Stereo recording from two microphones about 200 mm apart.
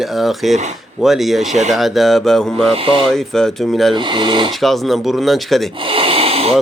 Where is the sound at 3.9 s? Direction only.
25° right (ahead or behind).